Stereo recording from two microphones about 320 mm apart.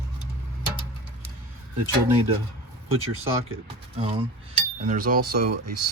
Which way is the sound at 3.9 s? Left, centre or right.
Centre.